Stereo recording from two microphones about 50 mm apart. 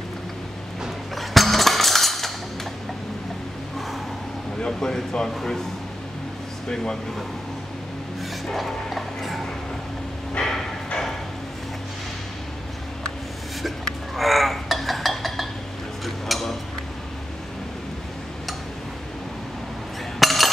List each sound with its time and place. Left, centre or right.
1.1 s a sound: centre
4.6 s speech: centre
6.7 s speech: centre
8.5 s music: centre
10.4 s dog: centre
14.1 s a sound: centre
20.2 s cutlery: centre